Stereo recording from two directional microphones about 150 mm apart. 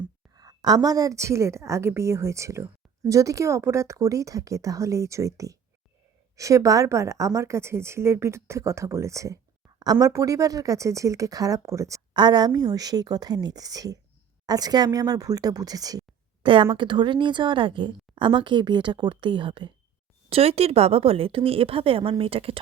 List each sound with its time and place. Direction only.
0.3 s a woman's voice: 25° right (ahead or behind)